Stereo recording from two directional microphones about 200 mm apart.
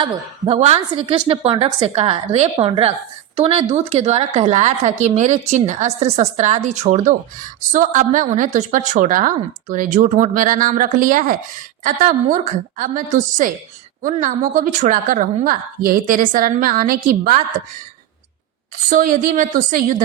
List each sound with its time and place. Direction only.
0.0 s a woman's voice: 30° right (ahead or behind); by 17.4 s 45° right (ahead or behind)
18.9 s a woman's voice: 40° right (ahead or behind)